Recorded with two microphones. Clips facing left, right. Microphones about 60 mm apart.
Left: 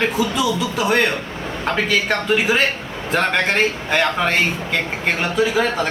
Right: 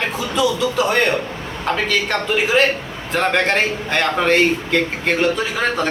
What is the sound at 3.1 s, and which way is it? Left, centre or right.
A man's voice, centre.